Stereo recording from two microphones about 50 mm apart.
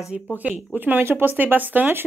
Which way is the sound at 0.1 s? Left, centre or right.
Right.